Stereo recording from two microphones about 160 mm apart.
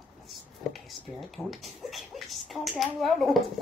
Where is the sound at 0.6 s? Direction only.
Centre (ahead or behind).